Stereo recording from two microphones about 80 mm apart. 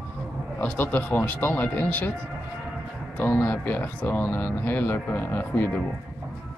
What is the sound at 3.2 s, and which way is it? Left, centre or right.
Speech, left.